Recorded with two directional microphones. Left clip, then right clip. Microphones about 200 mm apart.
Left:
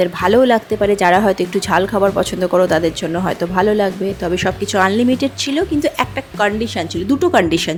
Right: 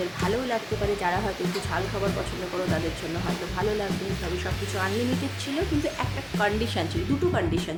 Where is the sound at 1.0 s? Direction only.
50° left (ahead or behind).